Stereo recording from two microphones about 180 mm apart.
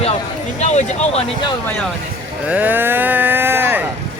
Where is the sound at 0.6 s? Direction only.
40° left (ahead or behind).